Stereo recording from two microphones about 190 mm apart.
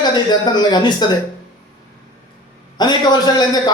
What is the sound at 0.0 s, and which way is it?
A man's voice, 20° left (ahead or behind).